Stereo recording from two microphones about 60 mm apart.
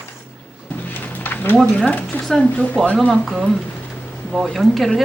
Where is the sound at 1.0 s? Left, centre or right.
Left.